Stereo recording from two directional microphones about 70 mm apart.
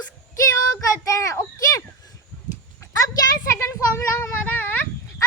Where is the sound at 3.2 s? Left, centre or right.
Left.